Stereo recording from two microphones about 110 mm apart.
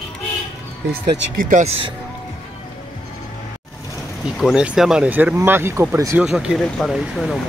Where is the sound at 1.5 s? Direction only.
90° right.